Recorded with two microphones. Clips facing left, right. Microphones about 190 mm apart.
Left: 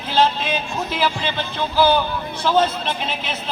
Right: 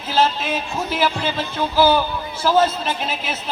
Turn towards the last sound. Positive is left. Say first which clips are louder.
# right 1 dB
turn(degrees=-5)  # may be behind; listen again after turning